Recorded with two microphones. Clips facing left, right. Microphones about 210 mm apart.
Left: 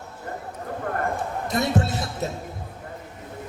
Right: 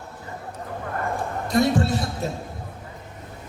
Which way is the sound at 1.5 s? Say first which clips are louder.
Right 4 dB; 20° left (ahead or behind).